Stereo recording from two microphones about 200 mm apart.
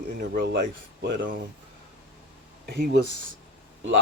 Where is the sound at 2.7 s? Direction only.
50° right (ahead or behind).